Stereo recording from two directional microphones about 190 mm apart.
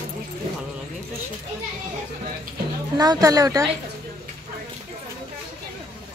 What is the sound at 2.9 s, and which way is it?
Speech, 20° right (ahead or behind).